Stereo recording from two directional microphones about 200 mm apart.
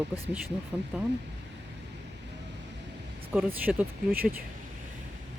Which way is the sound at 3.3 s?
5° right (ahead or behind).